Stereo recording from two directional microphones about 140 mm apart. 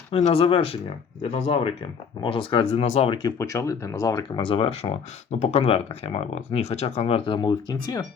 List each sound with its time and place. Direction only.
0.1 s speech: 45° left (ahead or behind)
3.2 s speech: 25° left (ahead or behind)
4.4 s speech: 40° left (ahead or behind)